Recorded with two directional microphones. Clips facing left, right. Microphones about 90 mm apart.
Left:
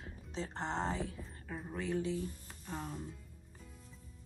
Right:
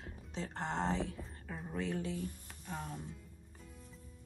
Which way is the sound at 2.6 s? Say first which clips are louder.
Left 1 dB; centre (ahead or behind).